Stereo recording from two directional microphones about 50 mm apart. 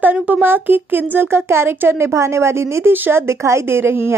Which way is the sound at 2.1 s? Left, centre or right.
Right.